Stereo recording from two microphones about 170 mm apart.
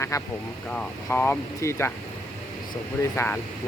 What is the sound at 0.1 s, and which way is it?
Speech, 20° left (ahead or behind).